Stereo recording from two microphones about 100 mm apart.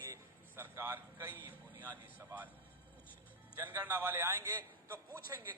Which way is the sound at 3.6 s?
20° right (ahead or behind).